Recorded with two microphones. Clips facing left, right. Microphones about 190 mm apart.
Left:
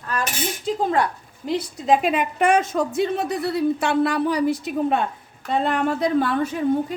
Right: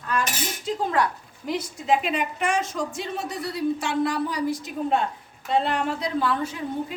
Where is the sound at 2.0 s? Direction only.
55° left (ahead or behind).